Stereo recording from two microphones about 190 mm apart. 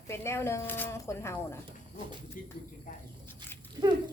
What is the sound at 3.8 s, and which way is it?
Dog, 25° right (ahead or behind).